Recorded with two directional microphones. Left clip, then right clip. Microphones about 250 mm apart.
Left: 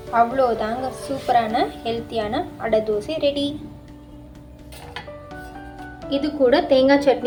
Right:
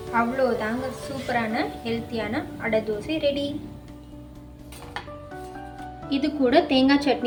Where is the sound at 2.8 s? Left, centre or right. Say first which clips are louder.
Left 5 dB; left.